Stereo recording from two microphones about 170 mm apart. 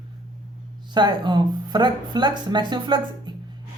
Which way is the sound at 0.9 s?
25° right (ahead or behind).